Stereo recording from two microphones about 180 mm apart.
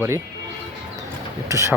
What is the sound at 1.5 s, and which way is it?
Speech, 15° right (ahead or behind).